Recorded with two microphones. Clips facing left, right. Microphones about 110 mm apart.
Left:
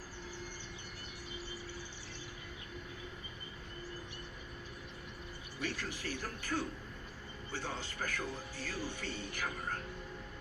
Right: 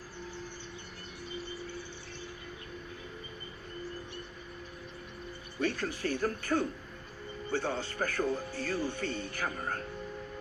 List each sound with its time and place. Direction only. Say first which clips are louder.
5.5 s a man's voice: right 8 dB; 55° right (ahead or behind)